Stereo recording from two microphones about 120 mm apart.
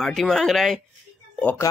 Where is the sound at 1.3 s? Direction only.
15° left (ahead or behind).